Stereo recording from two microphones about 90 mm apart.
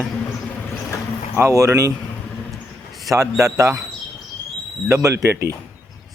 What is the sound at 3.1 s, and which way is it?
Speech, 35° right (ahead or behind).